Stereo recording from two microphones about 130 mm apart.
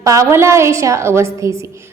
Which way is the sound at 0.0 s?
25° right (ahead or behind).